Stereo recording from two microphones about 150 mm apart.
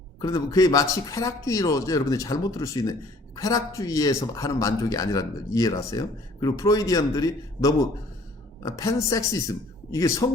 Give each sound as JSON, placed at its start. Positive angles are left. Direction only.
{"t": 0.2, "sound": "speech", "side_deg": 25}